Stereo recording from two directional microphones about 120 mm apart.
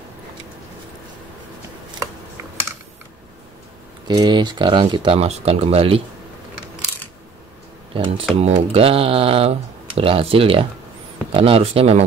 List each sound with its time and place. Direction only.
4.1 s speech: 35° right (ahead or behind)
5.2 s speech: 60° right (ahead or behind)
7.9 s speech: 50° right (ahead or behind)
8.4 s speech: 65° right (ahead or behind)